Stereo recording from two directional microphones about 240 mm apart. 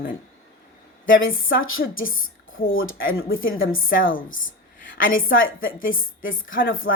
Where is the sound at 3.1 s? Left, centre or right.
Left.